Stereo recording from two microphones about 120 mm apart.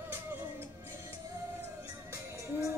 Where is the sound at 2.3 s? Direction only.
25° right (ahead or behind).